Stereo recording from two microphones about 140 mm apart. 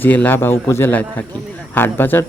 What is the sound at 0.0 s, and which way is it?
Speech, 15° left (ahead or behind).